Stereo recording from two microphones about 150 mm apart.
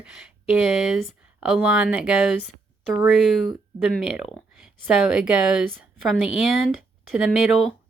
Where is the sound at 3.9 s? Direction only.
5° right (ahead or behind).